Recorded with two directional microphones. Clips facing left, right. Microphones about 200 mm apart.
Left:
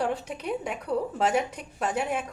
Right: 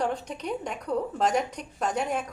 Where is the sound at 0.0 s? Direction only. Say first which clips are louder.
Even; 5° left (ahead or behind).